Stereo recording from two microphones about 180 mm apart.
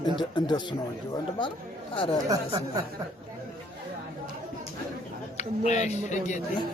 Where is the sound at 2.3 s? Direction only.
20° right (ahead or behind).